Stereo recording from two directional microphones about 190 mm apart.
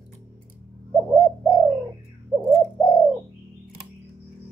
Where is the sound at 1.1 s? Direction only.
Centre (ahead or behind).